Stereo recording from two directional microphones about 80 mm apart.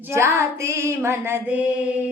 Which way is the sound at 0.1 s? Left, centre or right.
Right.